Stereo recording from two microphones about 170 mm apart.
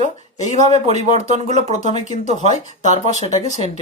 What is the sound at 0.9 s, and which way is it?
Speech, 40° right (ahead or behind).